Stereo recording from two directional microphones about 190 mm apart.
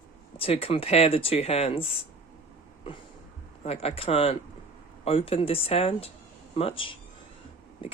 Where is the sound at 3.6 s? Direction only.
30° left (ahead or behind).